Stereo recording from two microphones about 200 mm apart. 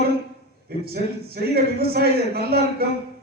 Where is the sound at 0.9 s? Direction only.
50° right (ahead or behind).